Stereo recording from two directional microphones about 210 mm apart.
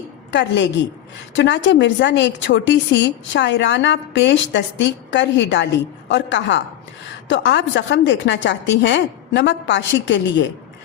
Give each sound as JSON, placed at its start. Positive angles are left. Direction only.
{"t": 0.3, "sound": "a woman's voice", "side_deg": 60}